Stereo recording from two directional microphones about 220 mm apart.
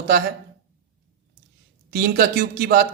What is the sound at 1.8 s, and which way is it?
A man's voice, 45° right (ahead or behind).